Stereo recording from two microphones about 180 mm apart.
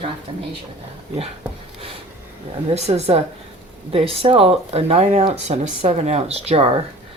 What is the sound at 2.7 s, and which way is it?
Speech, 35° right (ahead or behind).